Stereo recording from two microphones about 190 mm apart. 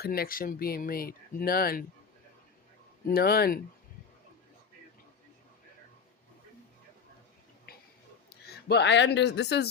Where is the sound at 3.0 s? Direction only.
55° left (ahead or behind).